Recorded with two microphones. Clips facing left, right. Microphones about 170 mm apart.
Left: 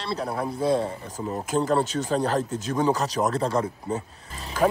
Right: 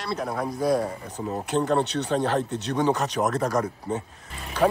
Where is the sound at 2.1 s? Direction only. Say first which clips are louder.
Even; 40° left (ahead or behind).